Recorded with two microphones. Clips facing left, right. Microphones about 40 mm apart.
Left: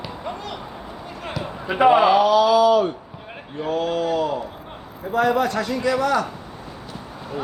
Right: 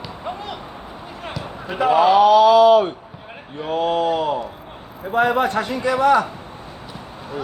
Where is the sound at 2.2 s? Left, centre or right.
Right.